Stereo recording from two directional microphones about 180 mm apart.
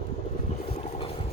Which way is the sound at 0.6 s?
30° left (ahead or behind).